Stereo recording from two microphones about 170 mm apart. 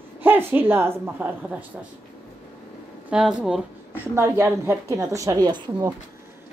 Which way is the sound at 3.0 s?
5° right (ahead or behind).